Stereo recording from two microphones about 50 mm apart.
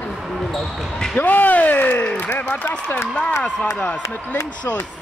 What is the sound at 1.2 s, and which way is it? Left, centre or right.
A man's voice, left.